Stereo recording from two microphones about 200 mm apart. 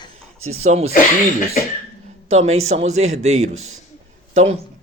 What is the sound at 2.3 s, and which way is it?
A man's voice, 35° right (ahead or behind).